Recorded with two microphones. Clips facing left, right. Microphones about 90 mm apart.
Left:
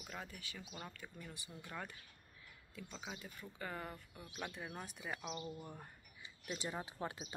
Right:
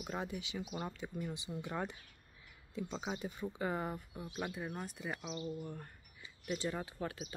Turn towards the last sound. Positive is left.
turn(degrees=20)  # may be behind; listen again after turning